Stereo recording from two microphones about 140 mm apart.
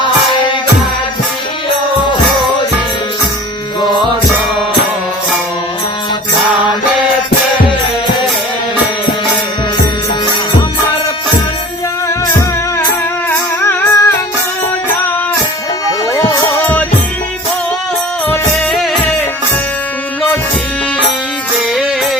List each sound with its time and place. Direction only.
13.6 s music: 15° left (ahead or behind)
15.9 s music: 25° left (ahead or behind)
18.7 s music: centre (ahead or behind)